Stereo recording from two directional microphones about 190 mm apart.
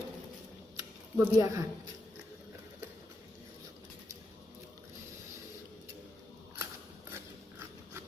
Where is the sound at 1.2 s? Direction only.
15° right (ahead or behind).